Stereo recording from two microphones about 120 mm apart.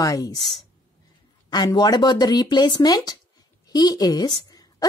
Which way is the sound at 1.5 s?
40° left (ahead or behind).